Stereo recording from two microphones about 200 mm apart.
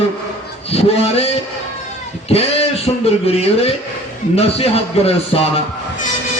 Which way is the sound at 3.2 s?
30° left (ahead or behind).